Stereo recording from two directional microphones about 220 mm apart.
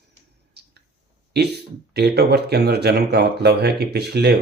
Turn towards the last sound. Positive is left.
turn(degrees=-45)  # may be behind; listen again after turning